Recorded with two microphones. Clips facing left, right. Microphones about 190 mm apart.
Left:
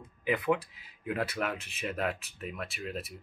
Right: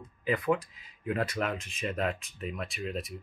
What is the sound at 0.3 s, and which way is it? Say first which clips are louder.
Speech: right 1 dB; 5° left (ahead or behind).